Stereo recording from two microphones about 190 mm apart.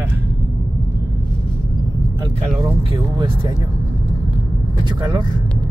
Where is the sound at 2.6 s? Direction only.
25° right (ahead or behind).